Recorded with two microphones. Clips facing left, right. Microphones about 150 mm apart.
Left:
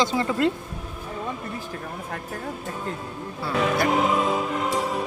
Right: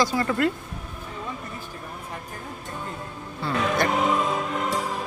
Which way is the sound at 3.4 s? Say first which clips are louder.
Even; 5° left (ahead or behind).